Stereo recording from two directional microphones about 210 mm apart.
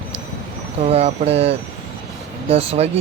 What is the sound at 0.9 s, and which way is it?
Speech, 30° right (ahead or behind).